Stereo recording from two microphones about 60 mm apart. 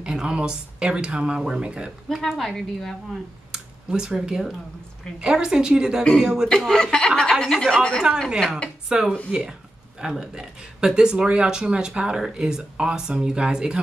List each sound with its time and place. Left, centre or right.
0.0 s speech: centre
2.1 s a woman's voice: centre
3.5 s speech: centre
6.5 s a woman's voice: centre
8.8 s speech: centre